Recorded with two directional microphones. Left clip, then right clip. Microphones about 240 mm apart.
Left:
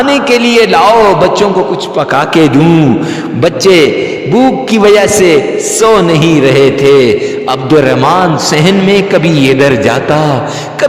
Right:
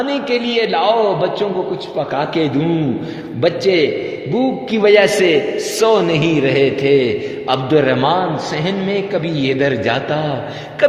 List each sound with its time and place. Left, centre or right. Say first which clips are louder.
0.0 s a man's voice: left 10 dB; left